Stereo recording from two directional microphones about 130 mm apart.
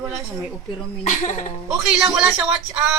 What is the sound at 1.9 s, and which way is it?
Speech, 5° right (ahead or behind).